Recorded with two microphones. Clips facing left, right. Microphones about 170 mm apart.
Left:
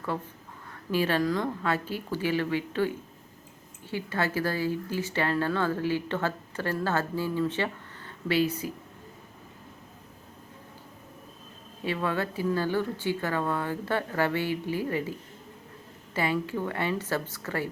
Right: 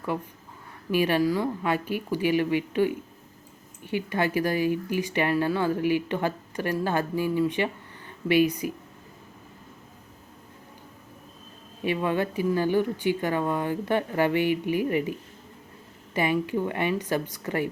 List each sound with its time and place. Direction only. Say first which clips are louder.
0.9 s speech: right 3 dB; 15° right (ahead or behind)
11.9 s speech: right 4 dB; 15° right (ahead or behind)
16.1 s speech: right 3 dB; 15° right (ahead or behind)